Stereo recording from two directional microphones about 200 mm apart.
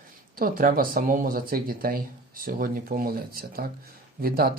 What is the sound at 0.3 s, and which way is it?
Speech, 45° right (ahead or behind).